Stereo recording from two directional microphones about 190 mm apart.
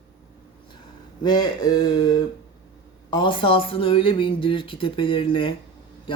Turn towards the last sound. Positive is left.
turn(degrees=25)  # may be behind; listen again after turning